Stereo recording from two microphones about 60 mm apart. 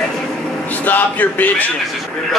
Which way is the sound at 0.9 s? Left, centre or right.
Left.